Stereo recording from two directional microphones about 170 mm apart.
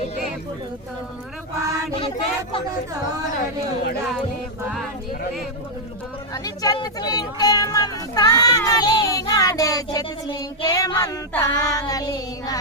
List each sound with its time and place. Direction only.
1.5 s a sound: 20° right (ahead or behind)
1.9 s speech: 30° left (ahead or behind)
6.3 s speech: 20° left (ahead or behind)